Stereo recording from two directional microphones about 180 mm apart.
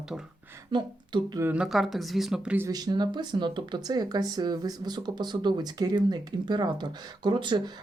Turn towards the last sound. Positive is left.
turn(degrees=-25)  # may be behind; listen again after turning